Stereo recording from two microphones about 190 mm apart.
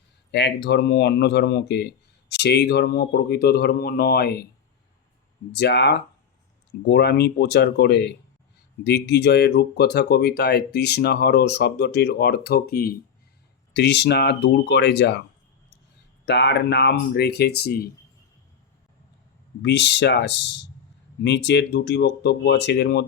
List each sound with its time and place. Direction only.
0.3 s speech: 65° left (ahead or behind)
5.5 s speech: 60° left (ahead or behind)
16.2 s speech: 65° left (ahead or behind)
19.6 s speech: 65° left (ahead or behind)